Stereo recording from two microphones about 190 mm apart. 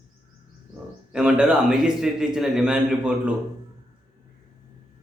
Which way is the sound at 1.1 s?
5° right (ahead or behind).